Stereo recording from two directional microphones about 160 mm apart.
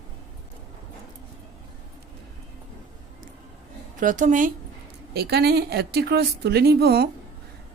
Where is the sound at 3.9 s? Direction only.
55° right (ahead or behind).